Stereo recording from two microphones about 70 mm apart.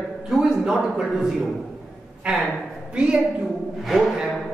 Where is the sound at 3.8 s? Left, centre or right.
Centre.